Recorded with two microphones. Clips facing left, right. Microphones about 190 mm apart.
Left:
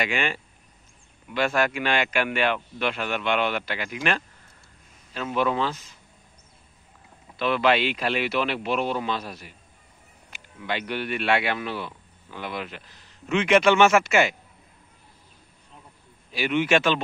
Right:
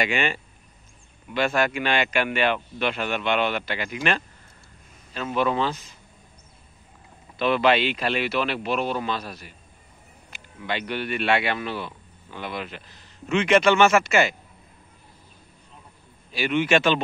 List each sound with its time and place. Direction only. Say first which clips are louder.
0.0 s speech: right 2 dB; centre (ahead or behind)
7.3 s speech: right 2 dB; 5° left (ahead or behind); by 9.5 s 20° left (ahead or behind)
10.7 s speech: even; 10° left (ahead or behind)
16.3 s a man's voice: right 1 dB; 10° left (ahead or behind)